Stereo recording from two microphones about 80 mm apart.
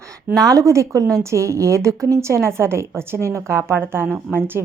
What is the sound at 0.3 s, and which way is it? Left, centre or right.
A woman's voice, right.